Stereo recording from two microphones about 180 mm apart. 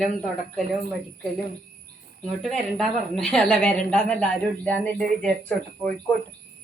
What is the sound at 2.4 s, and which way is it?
A woman's voice, centre (ahead or behind).